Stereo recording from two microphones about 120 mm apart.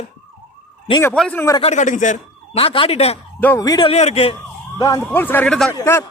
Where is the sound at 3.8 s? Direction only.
65° left (ahead or behind).